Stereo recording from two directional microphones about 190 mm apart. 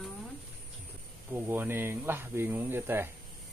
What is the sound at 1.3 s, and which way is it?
Speech, 10° right (ahead or behind).